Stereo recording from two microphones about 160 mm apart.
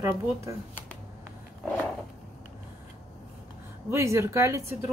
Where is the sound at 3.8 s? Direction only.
15° right (ahead or behind).